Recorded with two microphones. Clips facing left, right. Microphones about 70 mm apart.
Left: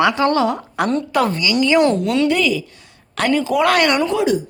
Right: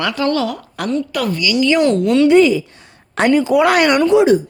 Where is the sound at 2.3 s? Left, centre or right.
Right.